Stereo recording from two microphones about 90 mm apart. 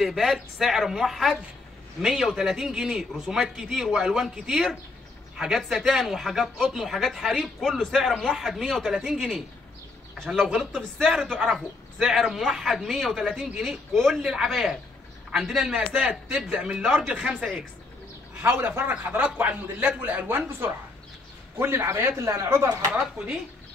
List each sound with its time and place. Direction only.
0.0 s speech: centre (ahead or behind)
10.1 s speech: 5° left (ahead or behind)
15.9 s a man's voice: 15° right (ahead or behind)
17.1 s a man's voice: 15° right (ahead or behind); by 22.7 s 35° right (ahead or behind)
22.8 s a man's voice: 20° right (ahead or behind)